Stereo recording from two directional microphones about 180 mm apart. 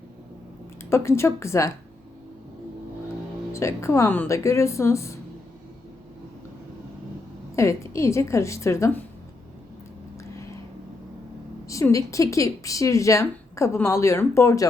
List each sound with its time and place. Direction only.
0.9 s speech: 15° left (ahead or behind)
3.5 s speech: 15° left (ahead or behind)
7.5 s speech: 15° left (ahead or behind)
11.7 s speech: 15° left (ahead or behind)